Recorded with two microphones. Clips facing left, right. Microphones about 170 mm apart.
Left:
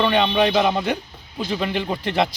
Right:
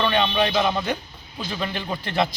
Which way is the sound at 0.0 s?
15° left (ahead or behind).